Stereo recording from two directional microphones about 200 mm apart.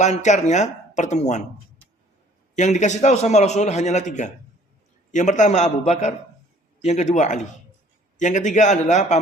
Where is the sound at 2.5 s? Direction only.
35° left (ahead or behind).